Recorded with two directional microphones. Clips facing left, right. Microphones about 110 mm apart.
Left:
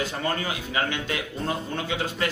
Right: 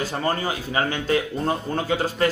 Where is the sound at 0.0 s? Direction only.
35° right (ahead or behind).